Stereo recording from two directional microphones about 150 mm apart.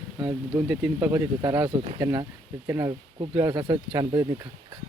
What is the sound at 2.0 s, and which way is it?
Speech, 20° right (ahead or behind).